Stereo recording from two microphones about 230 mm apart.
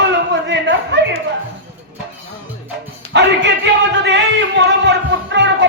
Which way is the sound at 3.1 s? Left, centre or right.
Right.